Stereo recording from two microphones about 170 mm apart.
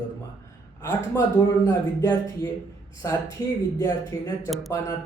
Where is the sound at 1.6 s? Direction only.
15° left (ahead or behind).